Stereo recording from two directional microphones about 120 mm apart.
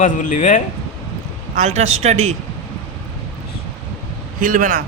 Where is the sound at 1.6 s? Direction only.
70° right (ahead or behind).